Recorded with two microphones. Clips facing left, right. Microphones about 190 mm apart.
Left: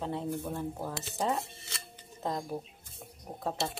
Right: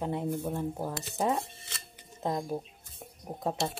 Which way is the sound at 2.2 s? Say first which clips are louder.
Right 3 dB; 15° right (ahead or behind).